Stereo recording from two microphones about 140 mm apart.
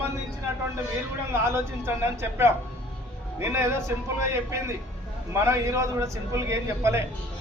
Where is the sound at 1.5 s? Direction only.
20° right (ahead or behind).